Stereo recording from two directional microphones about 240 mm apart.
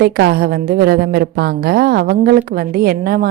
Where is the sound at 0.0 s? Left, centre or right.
Right.